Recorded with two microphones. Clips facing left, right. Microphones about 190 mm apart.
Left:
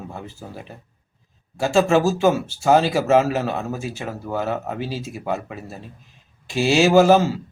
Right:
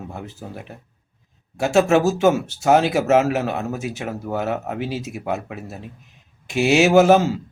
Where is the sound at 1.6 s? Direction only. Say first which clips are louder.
Right 1 dB; 15° right (ahead or behind).